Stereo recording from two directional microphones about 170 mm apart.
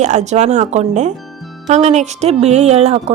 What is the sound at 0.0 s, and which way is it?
Speech, 45° right (ahead or behind).